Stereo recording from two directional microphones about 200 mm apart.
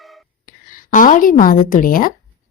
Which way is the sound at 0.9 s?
40° left (ahead or behind).